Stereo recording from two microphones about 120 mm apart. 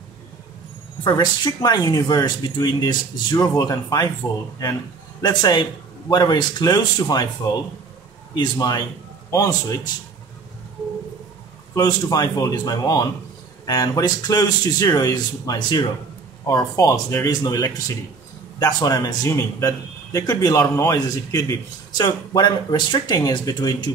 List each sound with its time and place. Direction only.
1.0 s speech: 35° left (ahead or behind)
5.2 s speech: 35° left (ahead or behind)
8.4 s a man's voice: 30° left (ahead or behind)
11.7 s speech: 30° left (ahead or behind)